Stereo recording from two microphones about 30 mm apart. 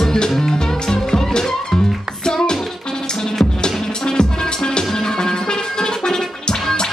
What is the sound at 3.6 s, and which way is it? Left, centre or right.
Music, left.